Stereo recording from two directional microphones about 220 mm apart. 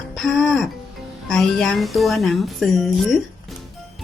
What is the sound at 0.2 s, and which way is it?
Speech, centre (ahead or behind).